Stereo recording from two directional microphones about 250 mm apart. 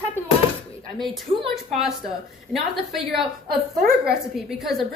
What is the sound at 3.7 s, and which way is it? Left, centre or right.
Speech, right.